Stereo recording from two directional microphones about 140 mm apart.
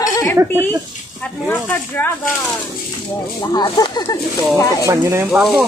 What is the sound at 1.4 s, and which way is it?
Speech, 10° left (ahead or behind).